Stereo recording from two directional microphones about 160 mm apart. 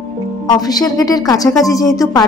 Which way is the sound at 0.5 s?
25° left (ahead or behind).